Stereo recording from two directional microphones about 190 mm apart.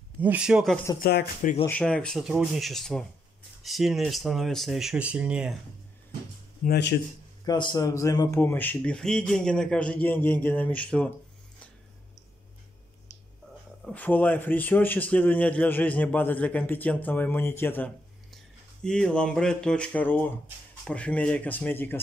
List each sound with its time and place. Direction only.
0.2 s speech: 5° right (ahead or behind)
1.0 s speech: 50° left (ahead or behind)
1.7 s speech: 5° left (ahead or behind)
6.6 s speech: 60° left (ahead or behind)
7.4 s speech: 20° left (ahead or behind)
13.8 s speech: 10° left (ahead or behind)